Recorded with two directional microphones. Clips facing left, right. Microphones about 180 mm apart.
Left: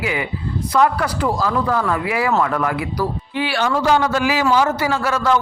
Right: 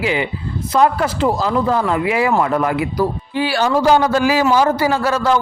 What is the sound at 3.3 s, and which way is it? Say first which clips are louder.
A man's voice: right 3 dB; 35° right (ahead or behind).